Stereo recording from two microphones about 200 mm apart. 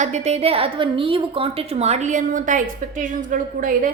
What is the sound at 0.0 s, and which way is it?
A woman's voice, 35° right (ahead or behind).